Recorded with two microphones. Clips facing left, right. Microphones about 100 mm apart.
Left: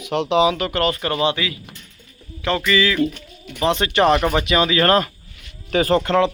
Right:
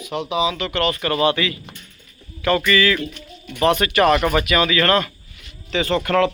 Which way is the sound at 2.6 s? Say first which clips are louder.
Left 4 dB; 15° left (ahead or behind).